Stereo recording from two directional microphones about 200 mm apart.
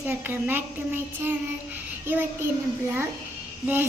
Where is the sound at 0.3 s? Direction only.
10° right (ahead or behind).